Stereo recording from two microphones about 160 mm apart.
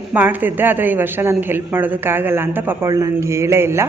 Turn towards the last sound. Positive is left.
turn(degrees=-15)  # may be behind; listen again after turning